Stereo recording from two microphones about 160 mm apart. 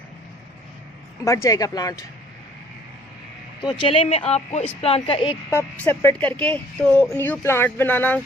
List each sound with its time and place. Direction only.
1.2 s speech: 20° left (ahead or behind)
3.6 s speech: 30° left (ahead or behind)
5.5 s speech: 10° left (ahead or behind)